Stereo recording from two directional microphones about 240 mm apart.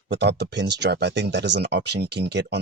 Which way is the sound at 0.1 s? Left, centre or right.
Right.